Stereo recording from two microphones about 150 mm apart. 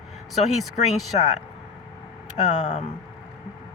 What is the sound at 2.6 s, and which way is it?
Speech, 45° left (ahead or behind).